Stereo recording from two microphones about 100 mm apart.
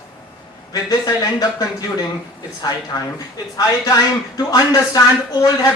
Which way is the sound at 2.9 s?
40° left (ahead or behind).